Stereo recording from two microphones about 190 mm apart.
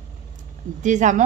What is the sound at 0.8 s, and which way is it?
Speech, 40° right (ahead or behind).